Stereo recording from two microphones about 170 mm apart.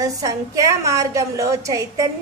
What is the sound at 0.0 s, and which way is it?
A woman's voice, 20° right (ahead or behind).